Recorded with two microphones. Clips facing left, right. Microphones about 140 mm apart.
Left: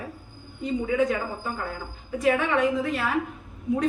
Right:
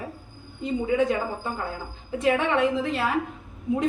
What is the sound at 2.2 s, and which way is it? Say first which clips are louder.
Speech: even; 25° right (ahead or behind).